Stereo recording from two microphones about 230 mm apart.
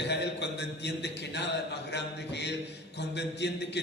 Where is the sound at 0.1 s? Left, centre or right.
Left.